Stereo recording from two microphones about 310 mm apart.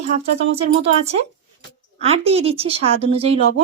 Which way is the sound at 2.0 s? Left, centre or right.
Centre.